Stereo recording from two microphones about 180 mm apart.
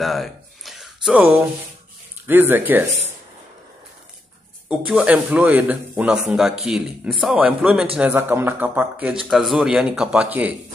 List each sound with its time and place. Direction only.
0.0 s a sound: centre (ahead or behind)
1.2 s a man's voice: 10° right (ahead or behind)
4.6 s a man's voice: 5° right (ahead or behind)